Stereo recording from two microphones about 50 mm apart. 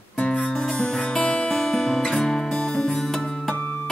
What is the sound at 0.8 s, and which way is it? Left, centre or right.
Music, centre.